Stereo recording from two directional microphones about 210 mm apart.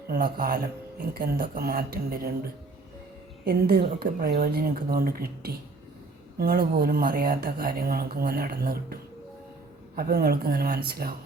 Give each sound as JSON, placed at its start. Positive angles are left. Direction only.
{"t": 0.1, "sound": "speech", "side_deg": -45}
{"t": 3.4, "sound": "speech", "side_deg": -50}